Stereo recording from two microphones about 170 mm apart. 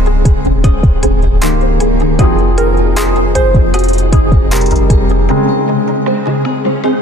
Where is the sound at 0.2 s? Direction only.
Centre (ahead or behind).